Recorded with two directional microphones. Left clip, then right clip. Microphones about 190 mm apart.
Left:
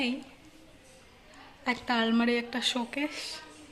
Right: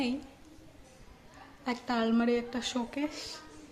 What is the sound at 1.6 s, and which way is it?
A woman's voice, 5° right (ahead or behind).